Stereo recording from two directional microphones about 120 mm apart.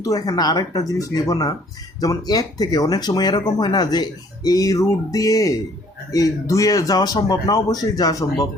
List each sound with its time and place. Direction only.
0.0 s speech: 30° left (ahead or behind)